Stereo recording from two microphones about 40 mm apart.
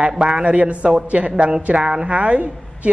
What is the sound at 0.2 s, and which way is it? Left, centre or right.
A woman's voice, right.